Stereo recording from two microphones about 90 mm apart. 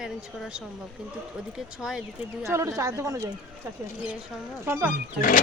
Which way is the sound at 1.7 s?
5° right (ahead or behind).